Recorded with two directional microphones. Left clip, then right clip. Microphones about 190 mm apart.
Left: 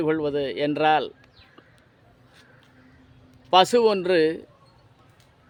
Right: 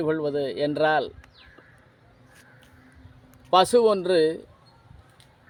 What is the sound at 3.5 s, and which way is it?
Speech, 20° left (ahead or behind).